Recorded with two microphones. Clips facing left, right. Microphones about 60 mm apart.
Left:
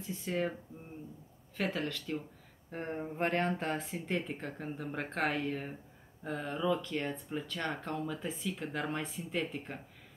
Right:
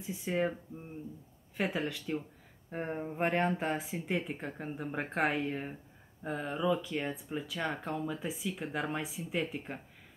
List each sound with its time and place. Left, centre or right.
0.0 s speech: centre
1.6 s speech: centre